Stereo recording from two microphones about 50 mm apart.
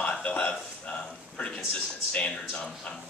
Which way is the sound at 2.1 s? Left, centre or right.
Left.